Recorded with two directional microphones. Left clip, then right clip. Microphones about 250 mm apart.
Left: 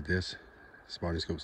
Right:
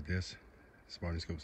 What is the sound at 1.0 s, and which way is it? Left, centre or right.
Speech, right.